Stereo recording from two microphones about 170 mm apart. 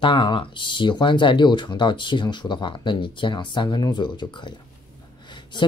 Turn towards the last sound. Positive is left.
turn(degrees=25)  # may be behind; listen again after turning